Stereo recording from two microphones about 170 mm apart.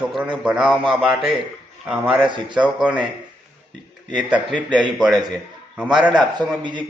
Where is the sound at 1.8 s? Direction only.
10° right (ahead or behind).